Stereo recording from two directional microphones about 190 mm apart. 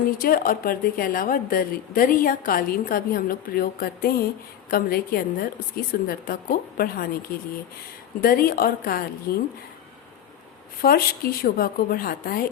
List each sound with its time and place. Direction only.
0.2 s a woman's voice: 50° left (ahead or behind)
8.2 s a woman's voice: 50° left (ahead or behind)
10.8 s a woman's voice: 50° left (ahead or behind)